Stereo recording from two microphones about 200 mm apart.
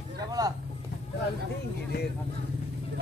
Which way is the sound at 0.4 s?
20° right (ahead or behind).